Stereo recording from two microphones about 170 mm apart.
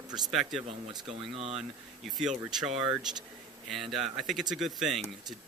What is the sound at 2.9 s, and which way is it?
Speech, centre (ahead or behind).